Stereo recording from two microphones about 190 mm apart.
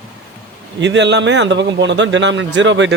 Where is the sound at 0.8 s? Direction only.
65° right (ahead or behind).